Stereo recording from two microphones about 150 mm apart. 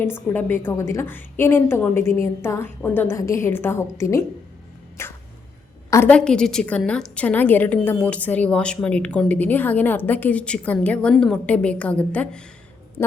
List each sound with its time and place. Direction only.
0.0 s a woman's voice: 15° left (ahead or behind)